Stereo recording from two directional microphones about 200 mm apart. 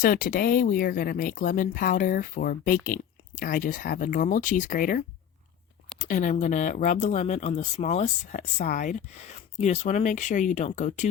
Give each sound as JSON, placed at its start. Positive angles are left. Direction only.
{"t": 0.0, "sound": "speech", "side_deg": 45}
{"t": 6.1, "sound": "speech", "side_deg": 40}